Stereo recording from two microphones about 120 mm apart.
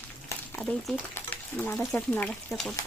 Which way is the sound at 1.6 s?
15° left (ahead or behind).